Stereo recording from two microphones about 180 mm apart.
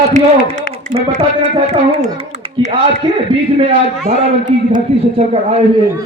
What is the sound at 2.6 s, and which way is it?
Speech, 40° right (ahead or behind).